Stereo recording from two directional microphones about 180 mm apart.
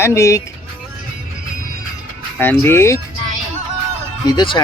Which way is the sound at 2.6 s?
15° left (ahead or behind).